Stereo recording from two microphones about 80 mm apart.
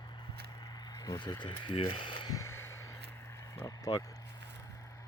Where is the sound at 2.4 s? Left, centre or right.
Left.